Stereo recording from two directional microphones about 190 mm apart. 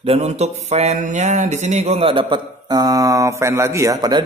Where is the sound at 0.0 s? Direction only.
35° right (ahead or behind).